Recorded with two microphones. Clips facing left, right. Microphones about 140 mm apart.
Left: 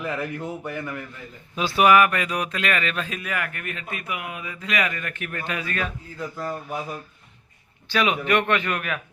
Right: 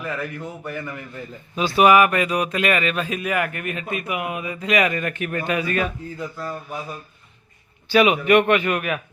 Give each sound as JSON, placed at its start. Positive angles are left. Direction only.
{"t": 0.0, "sound": "speech", "side_deg": 20}
{"t": 1.5, "sound": "speech", "side_deg": 0}
{"t": 6.3, "sound": "speech", "side_deg": 20}
{"t": 7.9, "sound": "speech", "side_deg": -10}